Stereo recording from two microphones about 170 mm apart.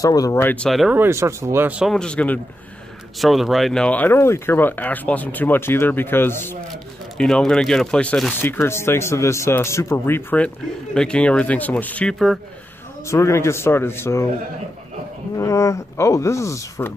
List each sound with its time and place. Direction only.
0.0 s speech: 20° left (ahead or behind); by 0.9 s centre (ahead or behind)
0.9 s speech: 15° right (ahead or behind); by 12.4 s centre (ahead or behind)
13.0 s speech: 15° left (ahead or behind)
15.3 s speech: 20° left (ahead or behind)